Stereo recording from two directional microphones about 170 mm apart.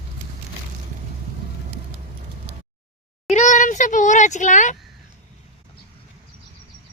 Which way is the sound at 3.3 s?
45° left (ahead or behind).